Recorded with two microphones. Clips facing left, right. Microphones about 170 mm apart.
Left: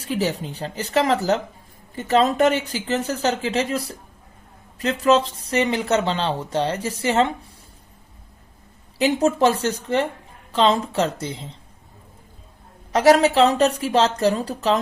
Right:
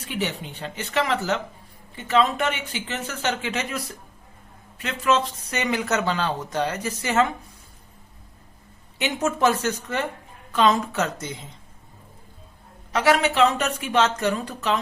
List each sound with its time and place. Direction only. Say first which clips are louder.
0.0 s speech: left 5 dB; 35° left (ahead or behind)
9.0 s speech: left 5 dB; 35° left (ahead or behind)
12.9 s speech: left 6 dB; 40° left (ahead or behind)